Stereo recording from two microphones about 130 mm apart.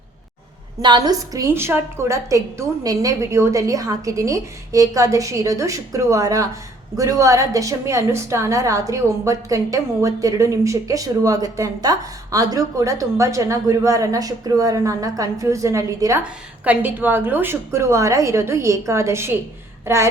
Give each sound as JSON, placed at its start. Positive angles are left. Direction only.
{"t": 0.8, "sound": "a woman's voice", "side_deg": -35}
{"t": 16.2, "sound": "a woman's voice", "side_deg": -15}